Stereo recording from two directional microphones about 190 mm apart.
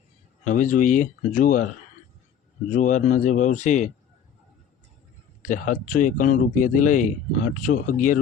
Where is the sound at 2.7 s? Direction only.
40° left (ahead or behind).